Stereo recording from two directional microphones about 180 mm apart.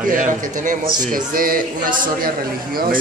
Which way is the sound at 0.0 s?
45° right (ahead or behind).